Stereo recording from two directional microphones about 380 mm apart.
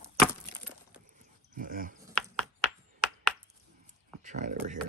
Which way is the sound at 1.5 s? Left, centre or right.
Right.